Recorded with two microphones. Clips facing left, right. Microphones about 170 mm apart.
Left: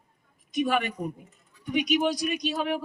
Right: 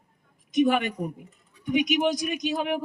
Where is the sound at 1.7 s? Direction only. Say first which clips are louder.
Right 2 dB; 20° right (ahead or behind).